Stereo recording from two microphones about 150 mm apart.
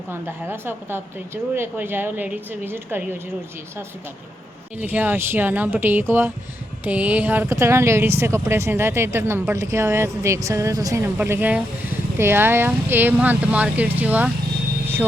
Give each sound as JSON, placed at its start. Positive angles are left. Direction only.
{"t": 0.1, "sound": "speech", "side_deg": -15}
{"t": 4.8, "sound": "speech", "side_deg": -10}